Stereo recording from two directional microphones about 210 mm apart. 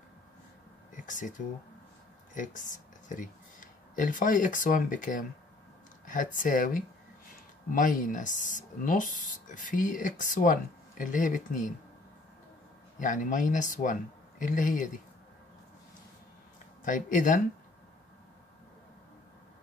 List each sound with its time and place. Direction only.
1.0 s speech: 40° left (ahead or behind)
2.3 s speech: 40° left (ahead or behind)
13.0 s speech: 40° left (ahead or behind)
16.8 s speech: 40° left (ahead or behind)